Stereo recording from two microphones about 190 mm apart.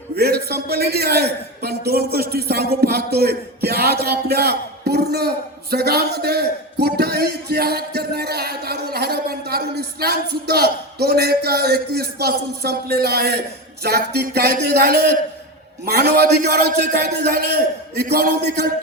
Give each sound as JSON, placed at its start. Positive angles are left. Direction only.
{"t": 0.2, "sound": "speech", "side_deg": -55}
{"t": 5.7, "sound": "a sound", "side_deg": -55}
{"t": 13.8, "sound": "speech", "side_deg": -55}